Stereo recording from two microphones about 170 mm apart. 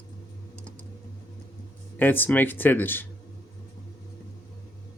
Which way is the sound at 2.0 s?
10° left (ahead or behind).